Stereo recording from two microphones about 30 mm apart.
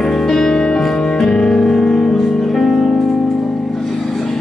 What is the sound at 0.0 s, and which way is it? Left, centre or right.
Music, centre.